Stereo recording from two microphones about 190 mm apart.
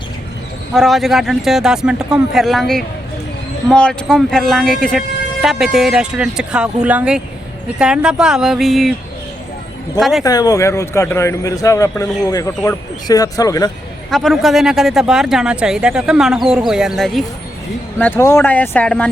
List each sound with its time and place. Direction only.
0.7 s speech: centre (ahead or behind)
10.0 s speech: centre (ahead or behind)
10.2 s speech: 20° left (ahead or behind)
14.1 s speech: centre (ahead or behind)
18.0 s speech: 15° left (ahead or behind)